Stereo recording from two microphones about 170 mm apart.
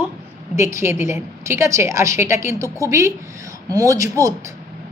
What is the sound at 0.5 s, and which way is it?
A woman's voice, 15° right (ahead or behind).